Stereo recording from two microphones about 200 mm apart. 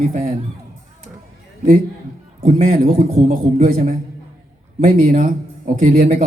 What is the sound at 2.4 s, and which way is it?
A man's voice, 35° right (ahead or behind).